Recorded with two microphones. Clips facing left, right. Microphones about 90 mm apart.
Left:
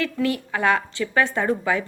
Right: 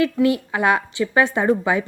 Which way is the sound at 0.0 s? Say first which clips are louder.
Right 6 dB; 20° right (ahead or behind).